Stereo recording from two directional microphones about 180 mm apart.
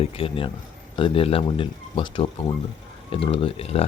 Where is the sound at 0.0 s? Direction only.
30° left (ahead or behind).